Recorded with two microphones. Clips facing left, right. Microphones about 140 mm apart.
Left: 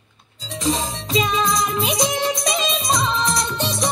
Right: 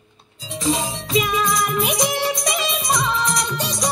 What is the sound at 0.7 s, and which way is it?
Music, 15° right (ahead or behind).